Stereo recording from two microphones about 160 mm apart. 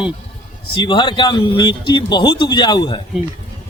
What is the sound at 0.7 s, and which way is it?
A man's voice, 30° left (ahead or behind).